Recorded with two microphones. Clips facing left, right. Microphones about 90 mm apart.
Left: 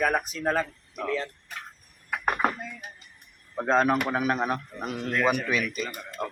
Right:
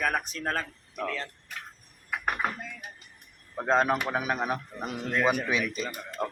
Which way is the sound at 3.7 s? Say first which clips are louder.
Left 2 dB; 15° right (ahead or behind).